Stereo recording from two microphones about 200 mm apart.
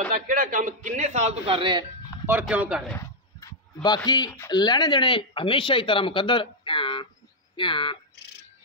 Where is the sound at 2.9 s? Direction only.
20° left (ahead or behind).